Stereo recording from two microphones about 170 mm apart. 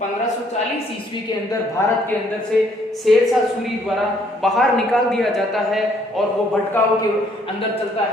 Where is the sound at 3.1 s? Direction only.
Centre (ahead or behind).